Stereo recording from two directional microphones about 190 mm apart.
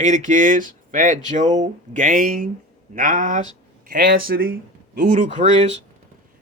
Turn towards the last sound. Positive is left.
turn(degrees=-40)  # may be behind; listen again after turning